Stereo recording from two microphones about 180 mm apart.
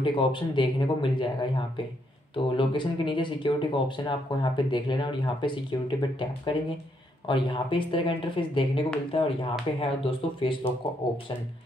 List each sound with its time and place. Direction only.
0.0 s speech: 25° left (ahead or behind)